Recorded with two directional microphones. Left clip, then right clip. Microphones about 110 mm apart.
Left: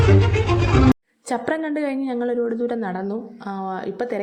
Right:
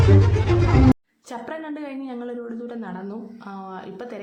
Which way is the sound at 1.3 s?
55° left (ahead or behind).